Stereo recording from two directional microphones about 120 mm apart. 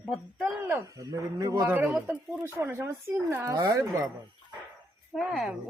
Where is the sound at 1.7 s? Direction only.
15° right (ahead or behind).